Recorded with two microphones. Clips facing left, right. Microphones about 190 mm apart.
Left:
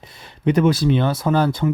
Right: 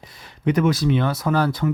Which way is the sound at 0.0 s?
25° left (ahead or behind).